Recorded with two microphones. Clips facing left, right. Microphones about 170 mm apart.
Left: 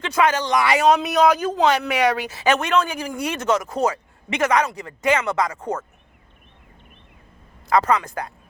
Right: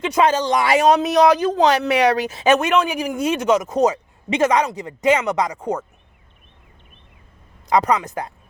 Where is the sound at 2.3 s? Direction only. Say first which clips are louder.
Right 3 dB; 20° right (ahead or behind).